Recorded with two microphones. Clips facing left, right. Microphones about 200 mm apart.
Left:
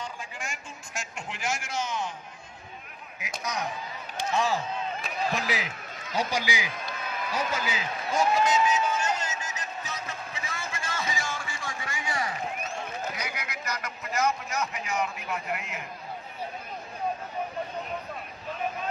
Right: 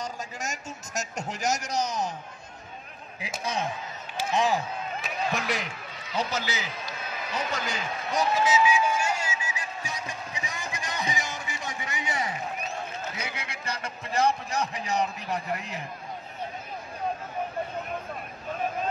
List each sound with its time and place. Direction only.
0.0 s a man's voice: 40° right (ahead or behind)
3.2 s speech: 30° right (ahead or behind)
5.0 s speech: centre (ahead or behind)
6.1 s a man's voice: 10° left (ahead or behind)
7.3 s a sound: 5° left (ahead or behind); by 12.4 s 20° right (ahead or behind)
13.1 s a man's voice: 25° right (ahead or behind)